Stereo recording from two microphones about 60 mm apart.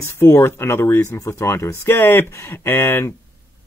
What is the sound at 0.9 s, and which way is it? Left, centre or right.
Speech, left.